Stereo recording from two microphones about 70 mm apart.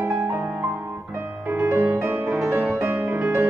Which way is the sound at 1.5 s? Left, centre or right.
Right.